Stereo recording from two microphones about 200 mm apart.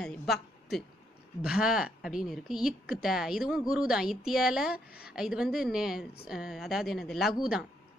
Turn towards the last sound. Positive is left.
turn(degrees=-5)  # may be behind; listen again after turning